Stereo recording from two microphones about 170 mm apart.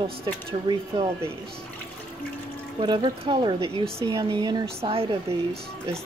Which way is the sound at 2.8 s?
25° right (ahead or behind).